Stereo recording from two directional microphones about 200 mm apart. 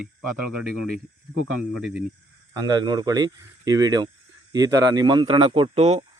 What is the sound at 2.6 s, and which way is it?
Speech, 20° right (ahead or behind).